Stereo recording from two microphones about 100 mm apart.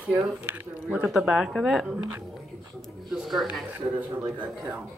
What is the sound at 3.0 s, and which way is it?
Speech, centre (ahead or behind).